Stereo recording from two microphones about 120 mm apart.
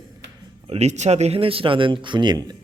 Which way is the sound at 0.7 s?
70° right (ahead or behind).